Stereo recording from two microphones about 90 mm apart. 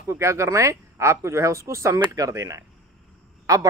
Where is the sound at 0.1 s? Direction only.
30° right (ahead or behind).